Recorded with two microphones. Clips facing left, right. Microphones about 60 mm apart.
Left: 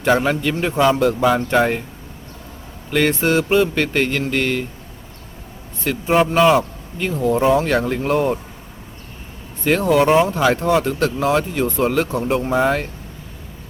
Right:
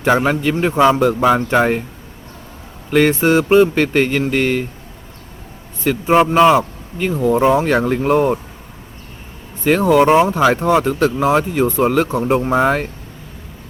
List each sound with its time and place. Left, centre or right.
0.0 s speech: centre
1.5 s speech: centre
2.9 s speech: right
5.8 s speech: centre
9.6 s speech: centre
12.5 s speech: right